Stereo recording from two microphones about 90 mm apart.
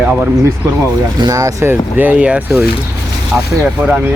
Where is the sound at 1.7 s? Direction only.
20° right (ahead or behind).